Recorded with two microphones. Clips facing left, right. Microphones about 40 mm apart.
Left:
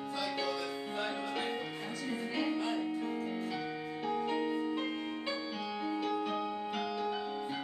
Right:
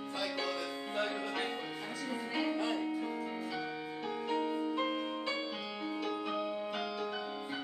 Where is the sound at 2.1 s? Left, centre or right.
Centre.